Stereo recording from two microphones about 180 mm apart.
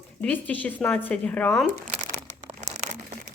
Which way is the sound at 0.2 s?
5° left (ahead or behind).